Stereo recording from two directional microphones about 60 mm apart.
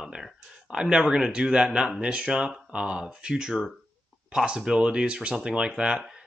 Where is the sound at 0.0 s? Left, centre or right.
Centre.